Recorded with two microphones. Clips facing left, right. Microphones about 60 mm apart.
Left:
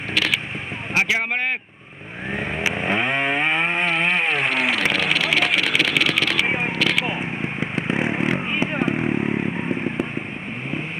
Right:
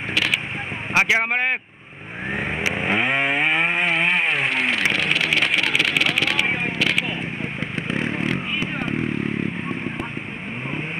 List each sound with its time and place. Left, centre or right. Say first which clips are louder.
0.9 s speech: right 2 dB; right
2.3 s vehicle: even; centre
7.6 s vehicle: left 3 dB; centre